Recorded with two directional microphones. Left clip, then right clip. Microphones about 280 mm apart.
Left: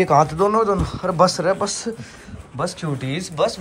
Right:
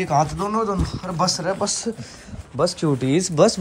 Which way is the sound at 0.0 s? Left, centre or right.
Centre.